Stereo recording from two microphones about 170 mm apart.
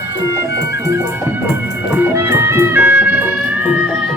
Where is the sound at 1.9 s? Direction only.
10° right (ahead or behind).